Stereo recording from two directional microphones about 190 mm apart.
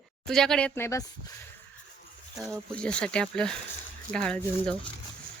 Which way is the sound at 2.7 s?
5° left (ahead or behind).